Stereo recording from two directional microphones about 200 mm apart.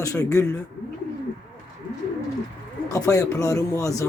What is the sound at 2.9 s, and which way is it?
Speech, 15° left (ahead or behind).